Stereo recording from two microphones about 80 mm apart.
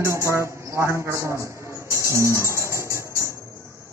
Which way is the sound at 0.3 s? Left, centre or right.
Right.